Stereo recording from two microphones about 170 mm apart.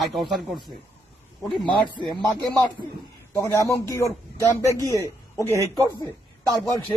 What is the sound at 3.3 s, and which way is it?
Speech, 20° left (ahead or behind).